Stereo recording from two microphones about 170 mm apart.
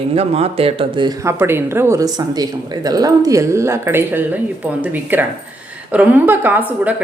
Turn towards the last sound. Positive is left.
turn(degrees=-10)  # may be behind; listen again after turning